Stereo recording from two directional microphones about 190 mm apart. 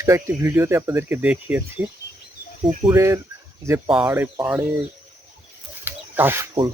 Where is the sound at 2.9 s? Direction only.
15° right (ahead or behind).